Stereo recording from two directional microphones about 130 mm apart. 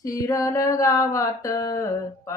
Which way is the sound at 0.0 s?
25° left (ahead or behind).